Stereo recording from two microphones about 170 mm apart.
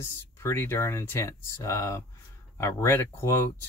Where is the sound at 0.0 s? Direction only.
15° left (ahead or behind).